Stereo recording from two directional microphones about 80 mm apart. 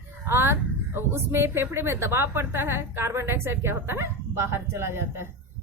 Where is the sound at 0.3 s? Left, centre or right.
Right.